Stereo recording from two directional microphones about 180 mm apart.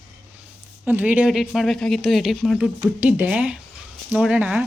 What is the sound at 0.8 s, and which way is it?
Speech, 10° right (ahead or behind).